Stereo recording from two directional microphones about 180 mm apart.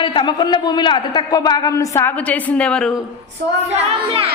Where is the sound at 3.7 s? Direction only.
35° right (ahead or behind).